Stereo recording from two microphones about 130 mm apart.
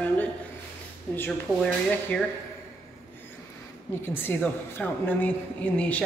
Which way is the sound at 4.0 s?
15° left (ahead or behind).